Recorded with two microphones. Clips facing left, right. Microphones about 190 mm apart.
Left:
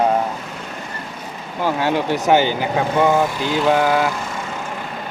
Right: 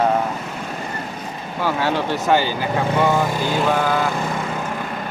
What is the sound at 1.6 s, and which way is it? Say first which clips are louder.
Speech: left 2 dB; 15° left (ahead or behind).